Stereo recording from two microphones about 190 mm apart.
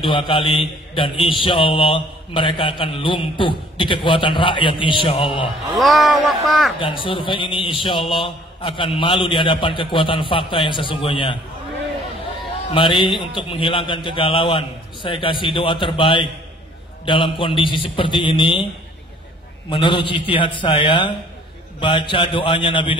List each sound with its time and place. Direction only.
0.0 s a man's voice: 25° left (ahead or behind)
5.8 s speech: centre (ahead or behind)
6.8 s a man's voice: 25° left (ahead or behind)
12.7 s a man's voice: 25° left (ahead or behind)
19.7 s a man's voice: 25° left (ahead or behind)